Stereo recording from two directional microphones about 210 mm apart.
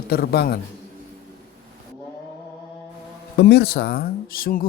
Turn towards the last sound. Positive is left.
turn(degrees=45)  # may be behind; listen again after turning